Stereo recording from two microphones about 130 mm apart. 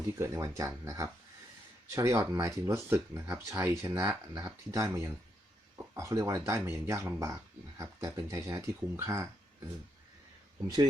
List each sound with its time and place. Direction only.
0.2 s speech: 20° right (ahead or behind)